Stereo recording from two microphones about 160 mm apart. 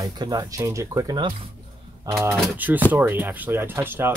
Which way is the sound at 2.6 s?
10° right (ahead or behind).